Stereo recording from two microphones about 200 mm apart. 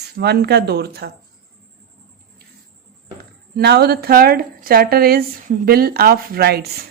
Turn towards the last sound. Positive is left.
turn(degrees=-50)  # may be behind; listen again after turning